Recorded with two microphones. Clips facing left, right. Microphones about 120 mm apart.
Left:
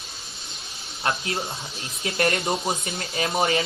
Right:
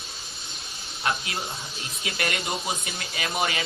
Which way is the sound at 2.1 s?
40° left (ahead or behind).